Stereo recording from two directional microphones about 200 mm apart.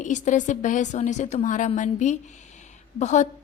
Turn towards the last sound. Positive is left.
turn(degrees=35)  # may be behind; listen again after turning